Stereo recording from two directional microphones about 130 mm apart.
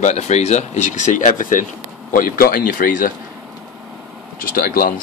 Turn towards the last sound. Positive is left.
turn(degrees=90)